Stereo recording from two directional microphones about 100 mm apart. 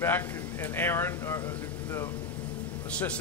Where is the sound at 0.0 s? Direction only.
20° left (ahead or behind).